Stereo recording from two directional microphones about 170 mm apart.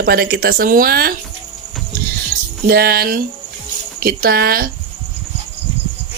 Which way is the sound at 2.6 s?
65° right (ahead or behind).